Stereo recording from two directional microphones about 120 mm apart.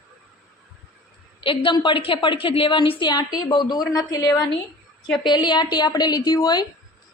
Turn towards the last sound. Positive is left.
turn(degrees=35)  # may be behind; listen again after turning